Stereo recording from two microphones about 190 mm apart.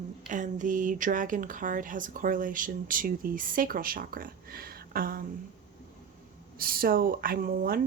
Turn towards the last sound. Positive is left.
turn(degrees=-50)  # may be behind; listen again after turning